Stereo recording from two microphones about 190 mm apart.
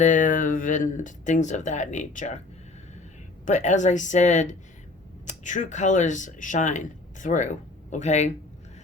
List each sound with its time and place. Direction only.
0.0 s speech: 40° left (ahead or behind)
3.4 s speech: 40° left (ahead or behind)